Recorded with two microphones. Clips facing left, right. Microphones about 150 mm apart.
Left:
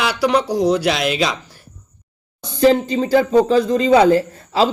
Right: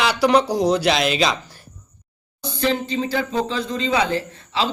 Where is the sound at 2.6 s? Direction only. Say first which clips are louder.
Left 8 dB; 40° left (ahead or behind).